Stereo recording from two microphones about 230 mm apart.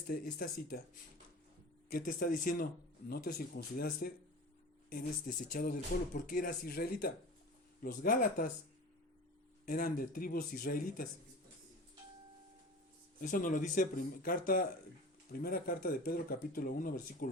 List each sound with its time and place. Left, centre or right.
0.1 s speech: left
1.9 s speech: left
9.6 s speech: left
13.2 s speech: left